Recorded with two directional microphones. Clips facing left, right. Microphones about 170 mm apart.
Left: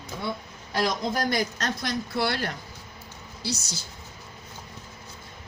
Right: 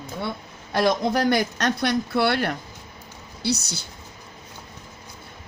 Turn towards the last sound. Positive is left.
turn(degrees=-65)  # may be behind; listen again after turning